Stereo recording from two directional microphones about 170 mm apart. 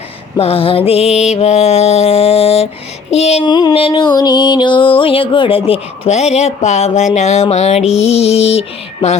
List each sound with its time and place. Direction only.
0.3 s music: 35° left (ahead or behind)
3.4 s music: 25° left (ahead or behind)